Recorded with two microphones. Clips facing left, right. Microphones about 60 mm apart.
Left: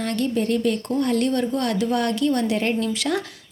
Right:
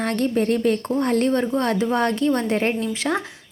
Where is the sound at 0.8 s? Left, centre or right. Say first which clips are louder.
Right 1 dB; right.